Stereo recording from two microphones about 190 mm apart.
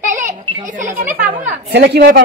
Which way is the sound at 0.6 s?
40° right (ahead or behind).